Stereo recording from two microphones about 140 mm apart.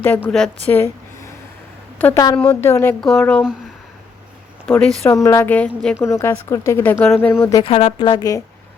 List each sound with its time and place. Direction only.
0.0 s a woman's voice: 15° left (ahead or behind)
0.3 s speech: 5° left (ahead or behind)
0.7 s a sound: 15° left (ahead or behind)
2.0 s a woman's voice: 15° left (ahead or behind)
3.0 s speech: 5° left (ahead or behind)
4.6 s speech: 15° left (ahead or behind)
5.5 s a woman's voice: 10° left (ahead or behind)
7.6 s a woman's voice: 45° left (ahead or behind)